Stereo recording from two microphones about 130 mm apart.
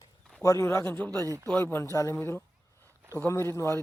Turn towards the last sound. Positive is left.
turn(degrees=20)  # may be behind; listen again after turning